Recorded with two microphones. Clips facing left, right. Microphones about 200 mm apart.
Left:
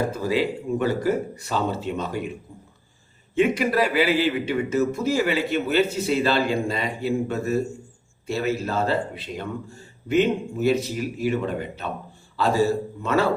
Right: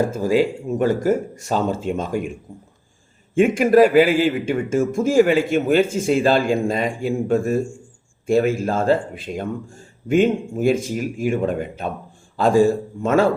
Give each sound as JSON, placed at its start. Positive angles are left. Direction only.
{"t": 0.1, "sound": "a man's voice", "side_deg": -45}
{"t": 3.3, "sound": "a man's voice", "side_deg": -45}